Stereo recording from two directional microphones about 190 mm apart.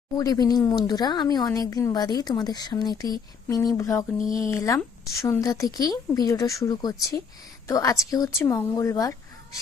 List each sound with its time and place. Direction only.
0.2 s a woman's voice: 20° left (ahead or behind)